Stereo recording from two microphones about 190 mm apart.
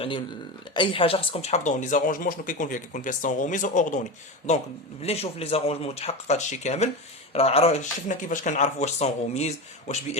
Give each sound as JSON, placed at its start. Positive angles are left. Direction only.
{"t": 0.7, "sound": "speech", "side_deg": 25}